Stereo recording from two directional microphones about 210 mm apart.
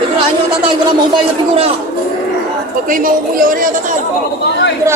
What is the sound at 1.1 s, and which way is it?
Speech, 30° right (ahead or behind).